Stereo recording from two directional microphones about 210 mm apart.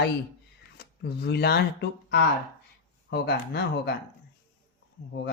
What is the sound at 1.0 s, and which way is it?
Speech, 50° left (ahead or behind).